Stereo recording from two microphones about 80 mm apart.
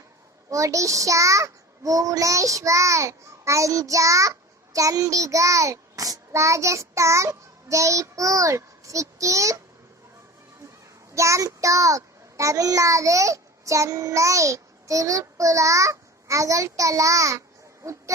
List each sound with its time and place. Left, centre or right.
0.5 s child singing: right
11.1 s a child's voice: right